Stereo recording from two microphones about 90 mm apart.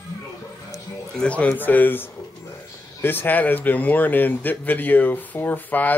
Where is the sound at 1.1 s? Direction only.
10° left (ahead or behind).